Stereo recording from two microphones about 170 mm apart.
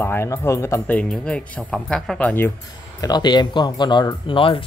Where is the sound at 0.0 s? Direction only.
15° left (ahead or behind).